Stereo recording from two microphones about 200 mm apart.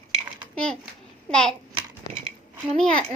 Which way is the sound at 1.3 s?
5° left (ahead or behind).